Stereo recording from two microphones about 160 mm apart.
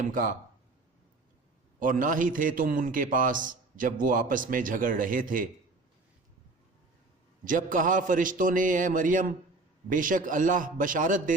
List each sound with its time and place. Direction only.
0.0 s a man's voice: 55° right (ahead or behind)
1.8 s a man's voice: 55° right (ahead or behind)
7.4 s a man's voice: 55° right (ahead or behind)